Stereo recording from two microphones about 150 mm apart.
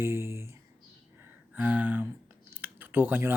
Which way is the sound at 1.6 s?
10° right (ahead or behind).